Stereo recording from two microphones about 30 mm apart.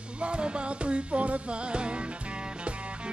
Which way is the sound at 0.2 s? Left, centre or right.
Right.